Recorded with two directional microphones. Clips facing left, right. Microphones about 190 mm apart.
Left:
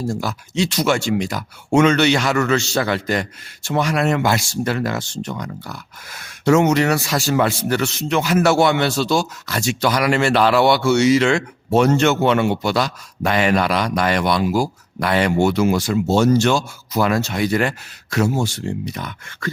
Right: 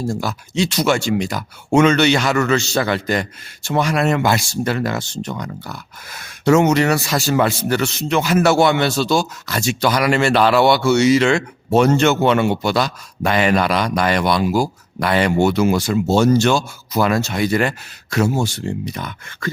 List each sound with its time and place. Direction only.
0.1 s speech: 30° right (ahead or behind)